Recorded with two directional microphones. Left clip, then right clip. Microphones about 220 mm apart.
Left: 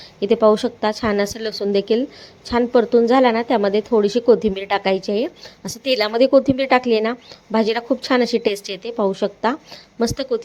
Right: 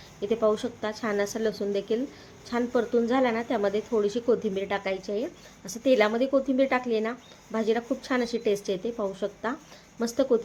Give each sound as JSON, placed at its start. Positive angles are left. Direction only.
{"t": 0.2, "sound": "a woman's voice", "side_deg": 30}